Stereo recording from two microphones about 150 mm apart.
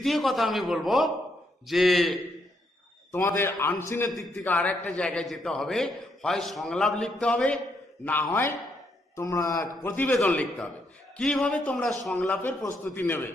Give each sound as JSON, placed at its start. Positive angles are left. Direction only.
{"t": 0.0, "sound": "a man's voice", "side_deg": 0}
{"t": 3.1, "sound": "a man's voice", "side_deg": 15}
{"t": 4.1, "sound": "a man's voice", "side_deg": 0}